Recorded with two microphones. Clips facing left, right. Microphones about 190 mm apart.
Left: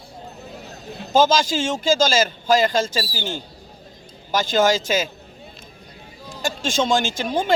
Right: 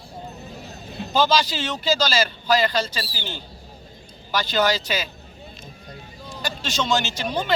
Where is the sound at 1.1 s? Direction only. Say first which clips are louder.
Left 3 dB; 45° left (ahead or behind).